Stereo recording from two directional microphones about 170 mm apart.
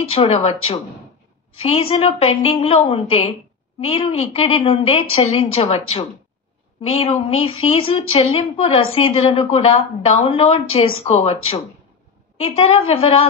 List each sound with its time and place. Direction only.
0.1 s speech: 35° left (ahead or behind)